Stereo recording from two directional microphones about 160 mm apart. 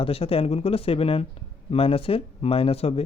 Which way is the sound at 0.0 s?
35° left (ahead or behind).